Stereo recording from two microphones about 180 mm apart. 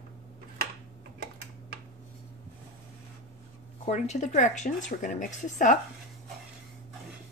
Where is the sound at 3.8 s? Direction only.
40° left (ahead or behind).